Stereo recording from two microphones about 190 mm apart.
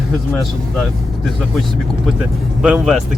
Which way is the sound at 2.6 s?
Centre (ahead or behind).